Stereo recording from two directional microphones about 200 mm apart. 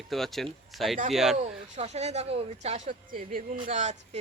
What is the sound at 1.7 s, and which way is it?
Speech, 35° right (ahead or behind).